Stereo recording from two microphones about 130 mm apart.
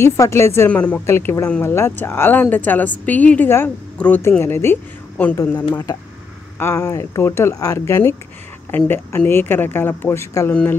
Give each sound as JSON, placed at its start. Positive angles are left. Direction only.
{"t": 0.0, "sound": "a woman's voice", "side_deg": 20}
{"t": 5.7, "sound": "a woman's voice", "side_deg": 30}